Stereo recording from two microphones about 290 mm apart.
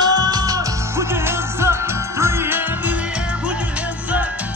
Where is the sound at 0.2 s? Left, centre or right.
Centre.